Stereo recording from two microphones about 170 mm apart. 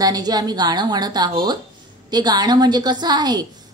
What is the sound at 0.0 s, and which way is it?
A woman's voice, 25° right (ahead or behind).